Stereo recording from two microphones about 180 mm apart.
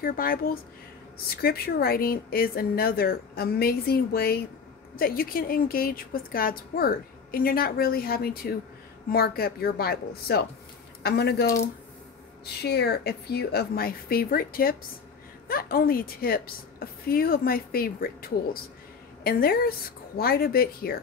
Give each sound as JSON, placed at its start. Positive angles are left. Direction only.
{"t": 0.0, "sound": "a woman's voice", "side_deg": 55}
{"t": 11.4, "sound": "speech", "side_deg": 15}
{"t": 12.6, "sound": "a woman's voice", "side_deg": 65}